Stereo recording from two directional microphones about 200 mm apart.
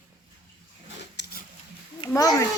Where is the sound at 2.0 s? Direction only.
15° left (ahead or behind).